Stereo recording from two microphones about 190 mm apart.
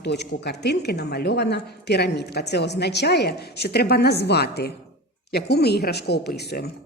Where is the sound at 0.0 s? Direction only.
65° left (ahead or behind).